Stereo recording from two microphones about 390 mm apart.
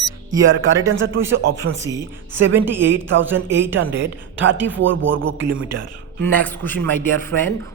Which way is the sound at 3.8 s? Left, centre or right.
Right.